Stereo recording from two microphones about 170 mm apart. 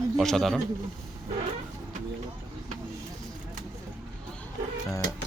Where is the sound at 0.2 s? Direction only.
Centre (ahead or behind).